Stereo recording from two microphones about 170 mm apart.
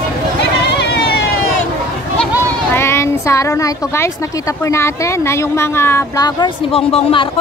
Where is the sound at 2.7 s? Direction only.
15° left (ahead or behind).